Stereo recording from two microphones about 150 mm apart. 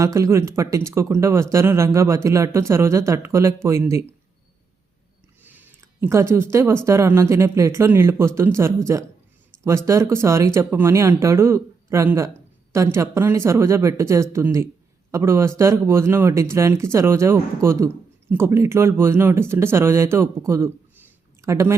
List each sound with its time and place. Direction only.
0.0 s speech: 20° right (ahead or behind)
5.4 s speech: 10° right (ahead or behind)